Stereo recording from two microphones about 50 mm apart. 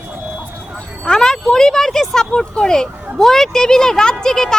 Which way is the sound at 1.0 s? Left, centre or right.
Centre.